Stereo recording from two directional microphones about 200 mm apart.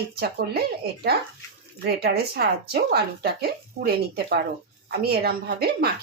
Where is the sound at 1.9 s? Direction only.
50° right (ahead or behind).